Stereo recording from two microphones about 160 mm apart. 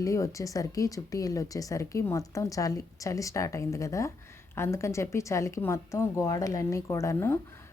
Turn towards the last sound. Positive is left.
turn(degrees=15)  # may be behind; listen again after turning